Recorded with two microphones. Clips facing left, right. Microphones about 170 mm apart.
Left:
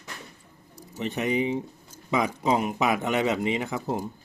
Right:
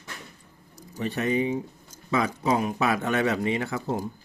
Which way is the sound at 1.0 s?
20° left (ahead or behind).